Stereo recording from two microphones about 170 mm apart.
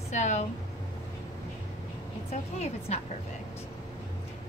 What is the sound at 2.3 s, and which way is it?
Speech, 40° left (ahead or behind).